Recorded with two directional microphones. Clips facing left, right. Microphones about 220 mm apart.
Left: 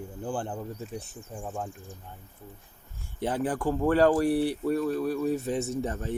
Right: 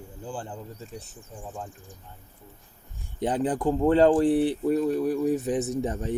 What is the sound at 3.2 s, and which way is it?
Speech, 20° right (ahead or behind).